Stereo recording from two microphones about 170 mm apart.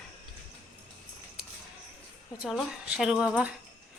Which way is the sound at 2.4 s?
5° right (ahead or behind).